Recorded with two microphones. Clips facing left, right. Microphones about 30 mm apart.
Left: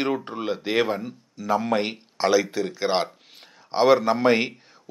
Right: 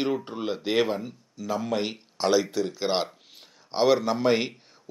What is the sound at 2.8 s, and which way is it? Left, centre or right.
Speech, centre.